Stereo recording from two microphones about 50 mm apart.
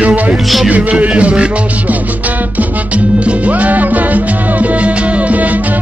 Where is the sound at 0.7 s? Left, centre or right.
Right.